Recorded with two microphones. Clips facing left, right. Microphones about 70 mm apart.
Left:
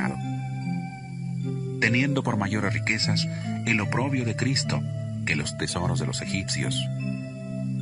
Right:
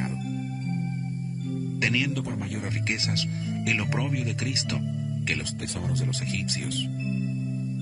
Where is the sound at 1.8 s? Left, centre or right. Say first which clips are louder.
Left 4 dB; left.